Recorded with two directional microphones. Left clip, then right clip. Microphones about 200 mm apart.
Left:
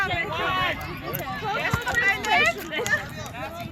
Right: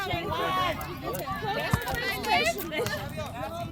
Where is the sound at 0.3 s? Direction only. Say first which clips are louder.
Left 1 dB; 65° right (ahead or behind).